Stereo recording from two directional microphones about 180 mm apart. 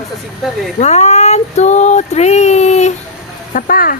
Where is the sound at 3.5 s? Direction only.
50° left (ahead or behind).